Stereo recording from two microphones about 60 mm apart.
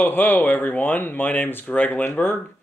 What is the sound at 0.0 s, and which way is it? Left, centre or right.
Speech, left.